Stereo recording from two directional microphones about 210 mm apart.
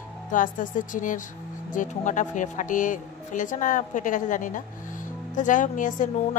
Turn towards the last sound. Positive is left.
turn(degrees=40)  # may be behind; listen again after turning